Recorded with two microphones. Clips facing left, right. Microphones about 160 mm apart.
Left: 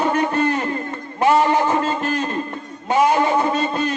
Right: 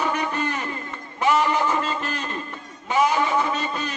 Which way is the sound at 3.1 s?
50° left (ahead or behind).